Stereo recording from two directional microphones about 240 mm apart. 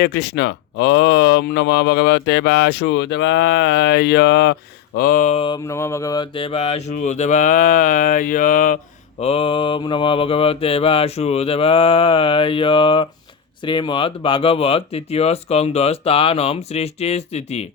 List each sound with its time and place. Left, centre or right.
0.0 s speech: left
4.9 s a sound: left
9.2 s speech: left